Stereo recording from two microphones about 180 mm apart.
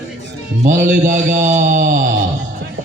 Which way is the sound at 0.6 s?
45° right (ahead or behind).